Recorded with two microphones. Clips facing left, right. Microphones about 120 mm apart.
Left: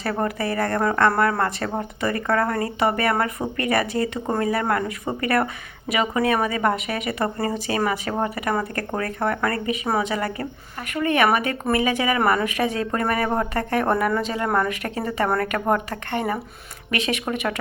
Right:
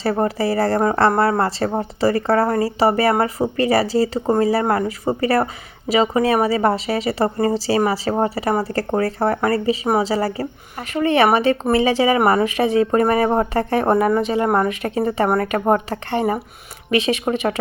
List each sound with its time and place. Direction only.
0.0 s a woman's voice: 25° right (ahead or behind)